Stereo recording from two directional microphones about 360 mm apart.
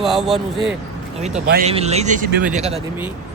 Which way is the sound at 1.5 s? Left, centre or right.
Centre.